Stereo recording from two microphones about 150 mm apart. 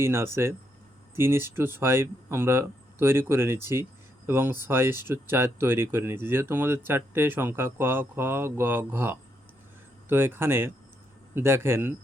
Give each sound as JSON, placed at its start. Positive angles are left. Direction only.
{"t": 0.0, "sound": "speech", "side_deg": -15}